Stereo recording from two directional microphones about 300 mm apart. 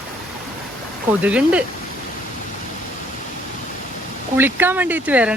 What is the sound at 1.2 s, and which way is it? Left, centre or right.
Speech, centre.